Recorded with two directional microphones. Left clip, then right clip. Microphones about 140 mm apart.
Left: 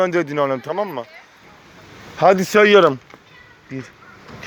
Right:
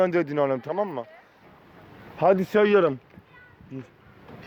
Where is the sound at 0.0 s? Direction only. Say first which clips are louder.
Left 4 dB; 30° right (ahead or behind).